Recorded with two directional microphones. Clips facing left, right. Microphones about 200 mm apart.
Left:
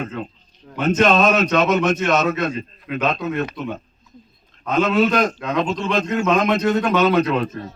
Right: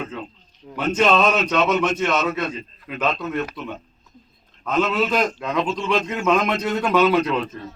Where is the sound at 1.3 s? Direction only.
5° left (ahead or behind).